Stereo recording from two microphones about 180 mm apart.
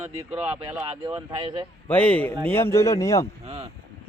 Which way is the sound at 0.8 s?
30° right (ahead or behind).